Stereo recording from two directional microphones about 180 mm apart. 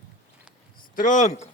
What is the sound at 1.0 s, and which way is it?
Speech, 45° left (ahead or behind).